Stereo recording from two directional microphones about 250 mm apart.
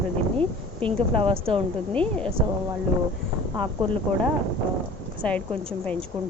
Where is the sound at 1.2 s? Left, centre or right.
Right.